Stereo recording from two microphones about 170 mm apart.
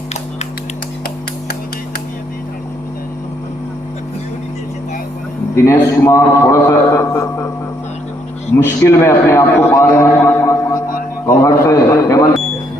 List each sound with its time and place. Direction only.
5.5 s a man's voice: 15° left (ahead or behind)
8.5 s a man's voice: 15° left (ahead or behind)
10.8 s a sound: 55° left (ahead or behind)
11.4 s a man's voice: 20° left (ahead or behind)